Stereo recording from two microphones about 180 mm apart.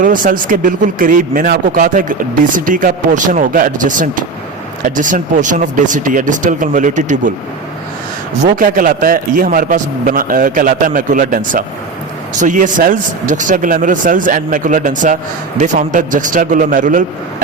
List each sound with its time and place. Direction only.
0.0 s speech: 50° right (ahead or behind)
8.4 s speech: 50° right (ahead or behind)